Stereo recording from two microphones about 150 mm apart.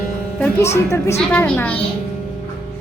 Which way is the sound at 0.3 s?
15° left (ahead or behind).